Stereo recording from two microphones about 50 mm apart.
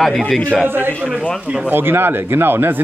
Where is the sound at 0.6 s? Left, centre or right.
Right.